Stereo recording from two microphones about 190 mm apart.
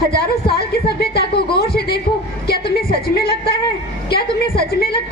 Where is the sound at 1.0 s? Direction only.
60° left (ahead or behind).